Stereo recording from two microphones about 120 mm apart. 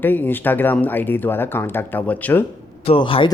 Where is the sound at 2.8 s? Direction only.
50° left (ahead or behind).